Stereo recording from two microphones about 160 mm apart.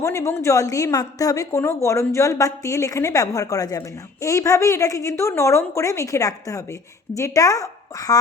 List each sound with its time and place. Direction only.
0.0 s a woman's voice: 20° left (ahead or behind)